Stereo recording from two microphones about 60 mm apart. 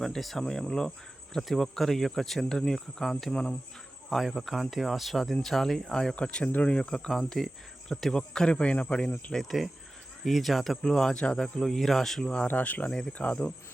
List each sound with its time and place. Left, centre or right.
0.0 s speech: centre
7.1 s speech: centre
9.3 s speech: centre
12.5 s speech: left